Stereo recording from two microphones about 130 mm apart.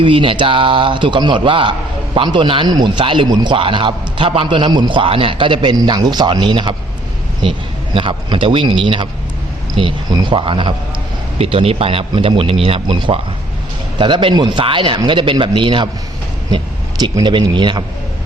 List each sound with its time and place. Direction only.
0.0 s a man's voice: 40° right (ahead or behind)
17.0 s a man's voice: 35° right (ahead or behind)